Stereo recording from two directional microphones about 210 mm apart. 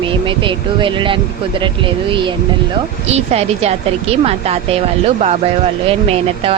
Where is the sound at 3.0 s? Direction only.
30° right (ahead or behind).